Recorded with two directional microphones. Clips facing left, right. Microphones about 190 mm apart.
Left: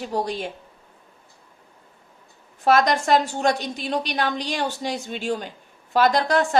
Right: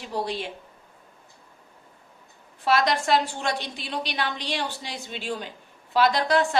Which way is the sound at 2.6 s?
45° left (ahead or behind).